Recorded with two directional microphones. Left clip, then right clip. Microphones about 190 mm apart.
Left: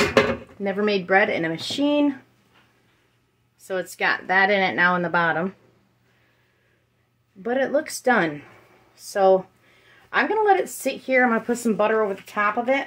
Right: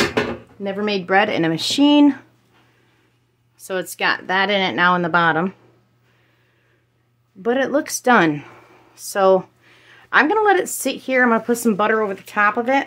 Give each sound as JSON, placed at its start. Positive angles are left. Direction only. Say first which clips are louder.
{"t": 0.6, "sound": "speech", "louder": "right 2 dB", "side_deg": -10}
{"t": 1.0, "sound": "speech", "louder": "right 5 dB", "side_deg": -40}
{"t": 3.5, "sound": "speech", "louder": "right 3 dB", "side_deg": -40}
{"t": 7.4, "sound": "speech", "louder": "right 3 dB", "side_deg": -40}